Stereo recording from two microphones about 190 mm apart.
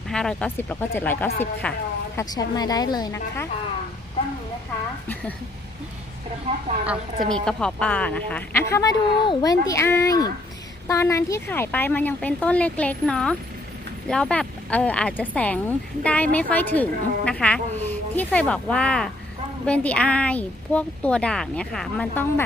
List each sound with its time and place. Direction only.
0.1 s speech: 5° left (ahead or behind)
2.1 s a woman's voice: 20° left (ahead or behind)
6.5 s speech: 35° right (ahead or behind)
7.3 s speech: 5° left (ahead or behind)